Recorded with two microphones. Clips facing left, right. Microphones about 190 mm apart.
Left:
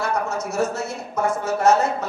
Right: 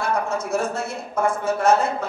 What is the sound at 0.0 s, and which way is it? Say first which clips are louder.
A woman's voice: even; 55° right (ahead or behind).